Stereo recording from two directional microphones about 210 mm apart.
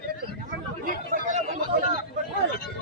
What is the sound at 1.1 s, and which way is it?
Chatter, 35° right (ahead or behind).